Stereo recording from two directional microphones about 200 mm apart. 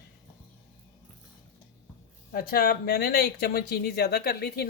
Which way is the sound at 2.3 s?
45° left (ahead or behind).